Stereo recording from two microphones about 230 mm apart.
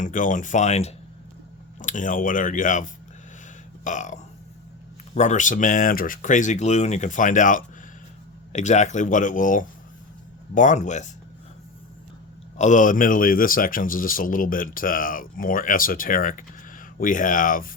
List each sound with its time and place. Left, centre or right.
0.0 s speech: left
12.5 s speech: left